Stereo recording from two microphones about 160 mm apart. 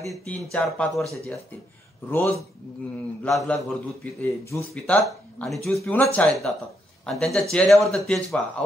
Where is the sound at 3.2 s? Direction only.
5° left (ahead or behind).